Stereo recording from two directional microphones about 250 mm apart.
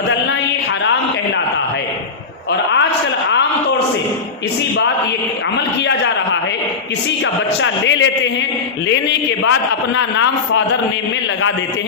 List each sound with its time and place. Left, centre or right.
7.6 s a man's voice: left
9.4 s a man's voice: left